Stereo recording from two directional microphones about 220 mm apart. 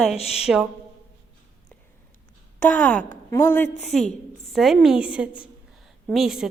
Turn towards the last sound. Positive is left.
turn(degrees=0)  # may be behind; listen again after turning